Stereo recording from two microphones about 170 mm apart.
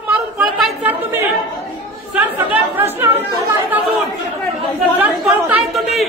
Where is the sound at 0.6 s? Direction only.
Centre (ahead or behind).